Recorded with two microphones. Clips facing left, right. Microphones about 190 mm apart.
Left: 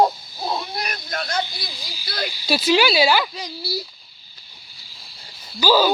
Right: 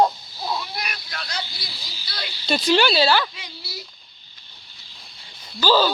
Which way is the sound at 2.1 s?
50° left (ahead or behind).